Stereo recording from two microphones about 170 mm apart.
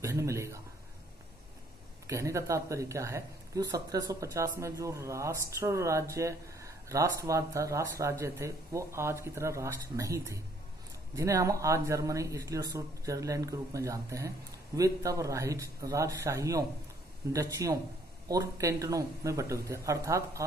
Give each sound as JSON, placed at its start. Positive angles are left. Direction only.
{"t": 0.0, "sound": "speech", "side_deg": -15}
{"t": 2.0, "sound": "speech", "side_deg": -15}